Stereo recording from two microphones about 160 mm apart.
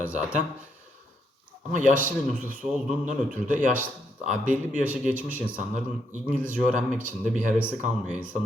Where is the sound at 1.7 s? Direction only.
55° right (ahead or behind).